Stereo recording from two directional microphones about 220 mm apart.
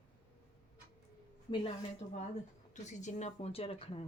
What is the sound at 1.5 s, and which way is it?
Speech, 25° left (ahead or behind).